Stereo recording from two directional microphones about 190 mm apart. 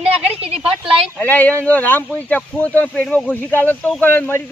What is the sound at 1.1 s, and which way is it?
Speech, 10° left (ahead or behind).